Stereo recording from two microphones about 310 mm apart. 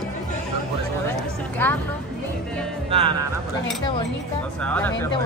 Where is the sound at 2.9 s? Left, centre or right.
Centre.